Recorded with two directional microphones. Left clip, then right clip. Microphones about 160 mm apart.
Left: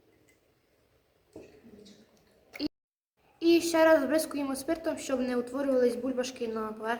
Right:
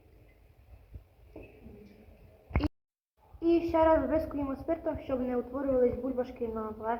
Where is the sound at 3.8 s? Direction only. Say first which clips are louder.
Left 2 dB; 40° left (ahead or behind).